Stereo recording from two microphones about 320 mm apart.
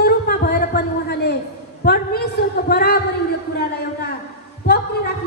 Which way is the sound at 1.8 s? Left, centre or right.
Left.